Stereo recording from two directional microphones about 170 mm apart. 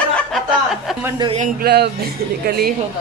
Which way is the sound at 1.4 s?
65° right (ahead or behind).